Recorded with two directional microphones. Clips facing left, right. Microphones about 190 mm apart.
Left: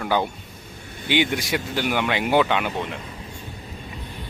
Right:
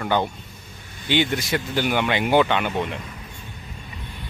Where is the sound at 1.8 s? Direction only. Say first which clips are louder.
Right 2 dB; centre (ahead or behind).